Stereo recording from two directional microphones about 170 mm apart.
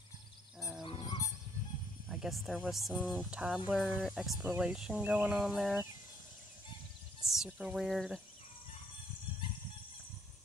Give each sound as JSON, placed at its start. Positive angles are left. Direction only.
{"t": 0.6, "sound": "roaring cats", "side_deg": 0}
{"t": 0.8, "sound": "goose", "side_deg": 25}
{"t": 2.0, "sound": "speech", "side_deg": 0}
{"t": 7.2, "sound": "speech", "side_deg": -5}